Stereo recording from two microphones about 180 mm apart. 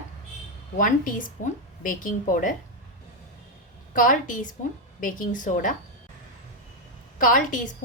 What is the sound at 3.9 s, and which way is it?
A woman's voice, 50° left (ahead or behind).